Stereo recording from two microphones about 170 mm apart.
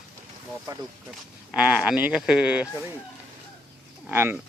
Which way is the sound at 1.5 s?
5° right (ahead or behind).